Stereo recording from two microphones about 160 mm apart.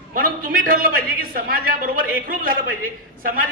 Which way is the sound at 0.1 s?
60° right (ahead or behind).